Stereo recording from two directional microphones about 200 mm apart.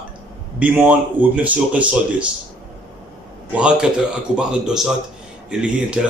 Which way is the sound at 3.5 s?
5° right (ahead or behind).